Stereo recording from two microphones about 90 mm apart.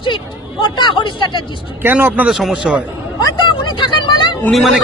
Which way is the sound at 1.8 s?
20° right (ahead or behind).